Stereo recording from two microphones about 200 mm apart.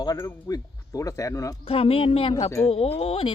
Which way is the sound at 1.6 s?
30° left (ahead or behind).